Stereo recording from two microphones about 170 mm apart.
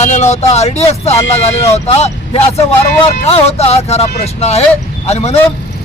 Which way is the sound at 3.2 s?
40° left (ahead or behind).